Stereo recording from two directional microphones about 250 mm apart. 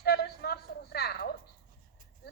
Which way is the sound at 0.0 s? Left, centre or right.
Left.